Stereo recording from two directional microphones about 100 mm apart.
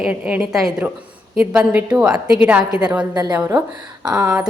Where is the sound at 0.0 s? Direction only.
15° right (ahead or behind).